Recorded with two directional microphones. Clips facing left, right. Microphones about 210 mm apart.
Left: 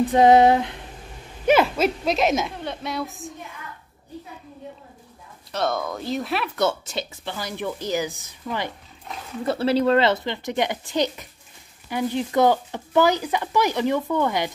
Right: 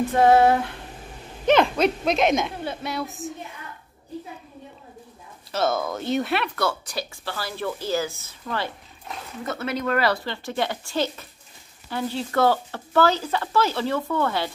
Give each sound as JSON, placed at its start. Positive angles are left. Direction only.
{"t": 0.1, "sound": "speech", "side_deg": 20}
{"t": 1.4, "sound": "speech", "side_deg": 5}
{"t": 5.5, "sound": "speech", "side_deg": 0}
{"t": 6.5, "sound": "speech", "side_deg": 20}
{"t": 9.4, "sound": "speech", "side_deg": 30}